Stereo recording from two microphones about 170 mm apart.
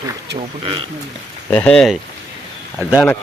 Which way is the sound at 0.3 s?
30° right (ahead or behind).